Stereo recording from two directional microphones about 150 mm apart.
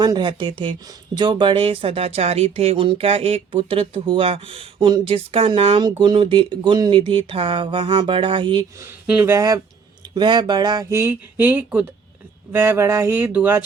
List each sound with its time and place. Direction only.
0.0 s speech: 30° right (ahead or behind)
8.8 s speech: 10° right (ahead or behind)
9.3 s speech: 20° right (ahead or behind)